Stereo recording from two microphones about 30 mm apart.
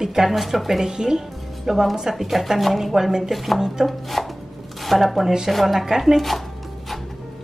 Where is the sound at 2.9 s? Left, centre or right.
Centre.